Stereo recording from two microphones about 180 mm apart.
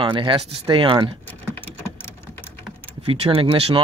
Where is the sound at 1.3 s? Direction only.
10° left (ahead or behind).